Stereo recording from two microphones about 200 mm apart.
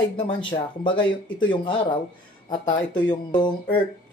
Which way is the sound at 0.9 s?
25° left (ahead or behind).